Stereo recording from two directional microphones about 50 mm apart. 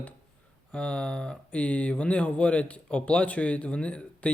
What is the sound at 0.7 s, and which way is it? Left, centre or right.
Speech, left.